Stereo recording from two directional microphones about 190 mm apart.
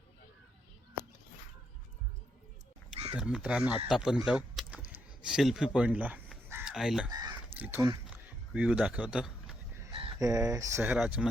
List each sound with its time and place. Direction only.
3.2 s speech: 5° right (ahead or behind)
4.3 s a sound: 5° right (ahead or behind)
7.1 s crow: 20° right (ahead or behind)
7.6 s a man's voice: 15° right (ahead or behind)
10.2 s speech: 15° right (ahead or behind)